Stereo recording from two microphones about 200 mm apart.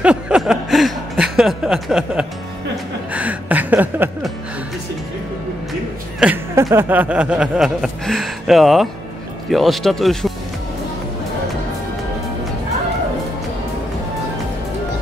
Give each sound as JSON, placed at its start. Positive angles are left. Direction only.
{"t": 0.0, "sound": "a sound", "side_deg": -5}
{"t": 3.1, "sound": "music", "side_deg": -5}
{"t": 5.7, "sound": "music", "side_deg": -5}
{"t": 9.5, "sound": "speech", "side_deg": 0}